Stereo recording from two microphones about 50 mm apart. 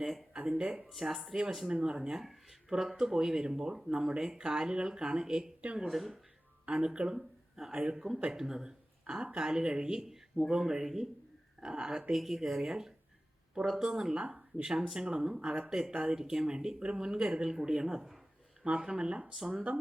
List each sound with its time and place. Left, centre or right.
0.0 s a sound: centre
0.9 s speech: centre
5.9 s speech: centre
6.7 s speech: centre
7.2 s speech: centre
12.1 s speech: centre
13.5 s speech: centre
18.6 s speech: right